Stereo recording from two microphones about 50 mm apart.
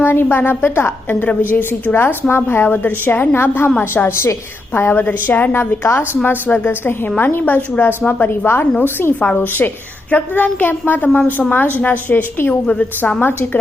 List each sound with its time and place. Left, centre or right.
0.0 s a woman's voice: left
5.0 s a woman's voice: left